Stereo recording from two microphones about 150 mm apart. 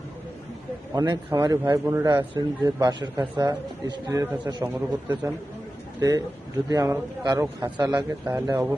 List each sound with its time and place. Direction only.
0.9 s a man's voice: 25° right (ahead or behind)